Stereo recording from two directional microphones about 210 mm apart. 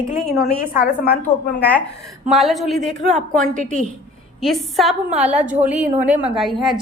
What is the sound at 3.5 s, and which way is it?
Speech, 35° right (ahead or behind).